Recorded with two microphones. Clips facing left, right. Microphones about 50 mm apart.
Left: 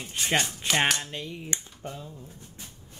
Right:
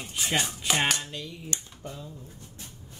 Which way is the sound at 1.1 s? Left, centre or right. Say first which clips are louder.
Left 2 dB; left.